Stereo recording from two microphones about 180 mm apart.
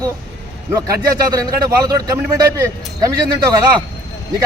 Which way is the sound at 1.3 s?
20° right (ahead or behind).